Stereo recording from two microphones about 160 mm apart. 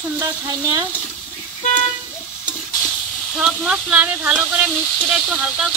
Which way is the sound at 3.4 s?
5° right (ahead or behind).